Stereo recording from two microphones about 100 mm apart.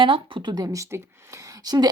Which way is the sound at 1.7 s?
45° right (ahead or behind).